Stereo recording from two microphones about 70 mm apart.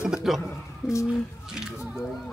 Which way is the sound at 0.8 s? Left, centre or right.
Left.